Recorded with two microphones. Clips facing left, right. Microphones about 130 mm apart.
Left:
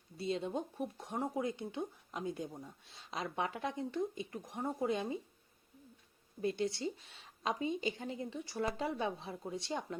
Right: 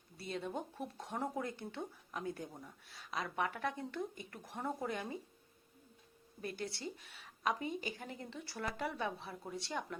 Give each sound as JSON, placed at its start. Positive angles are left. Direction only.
{"t": 0.2, "sound": "speech", "side_deg": 25}
{"t": 6.4, "sound": "speech", "side_deg": 20}